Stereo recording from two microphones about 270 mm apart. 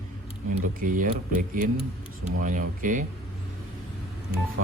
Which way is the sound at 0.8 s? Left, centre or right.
Right.